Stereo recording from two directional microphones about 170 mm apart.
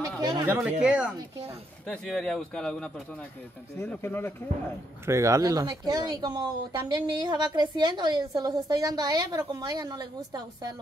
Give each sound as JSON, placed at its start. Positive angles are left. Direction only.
{"t": 0.2, "sound": "speech", "side_deg": -25}
{"t": 0.5, "sound": "speech", "side_deg": -10}
{"t": 5.0, "sound": "speech", "side_deg": -15}